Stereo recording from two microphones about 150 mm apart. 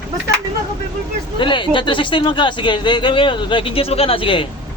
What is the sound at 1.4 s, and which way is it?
Speech, 35° left (ahead or behind).